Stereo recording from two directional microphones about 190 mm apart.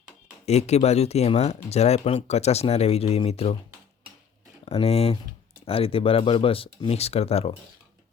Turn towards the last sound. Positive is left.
turn(degrees=30)  # may be behind; listen again after turning